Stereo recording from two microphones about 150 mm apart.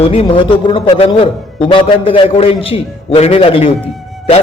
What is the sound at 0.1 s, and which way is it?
A man's voice, 35° left (ahead or behind).